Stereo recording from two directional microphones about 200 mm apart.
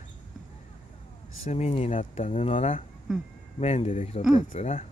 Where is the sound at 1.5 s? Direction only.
35° left (ahead or behind).